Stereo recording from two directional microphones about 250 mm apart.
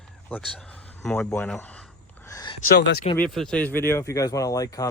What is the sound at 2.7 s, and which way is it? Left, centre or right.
Speech, left.